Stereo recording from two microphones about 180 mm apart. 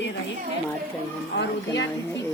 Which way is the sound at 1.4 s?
90° left.